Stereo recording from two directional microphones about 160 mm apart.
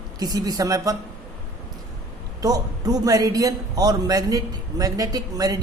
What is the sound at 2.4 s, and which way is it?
A man's voice, 25° right (ahead or behind).